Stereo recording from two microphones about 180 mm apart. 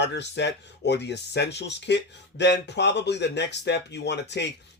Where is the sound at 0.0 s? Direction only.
70° left (ahead or behind).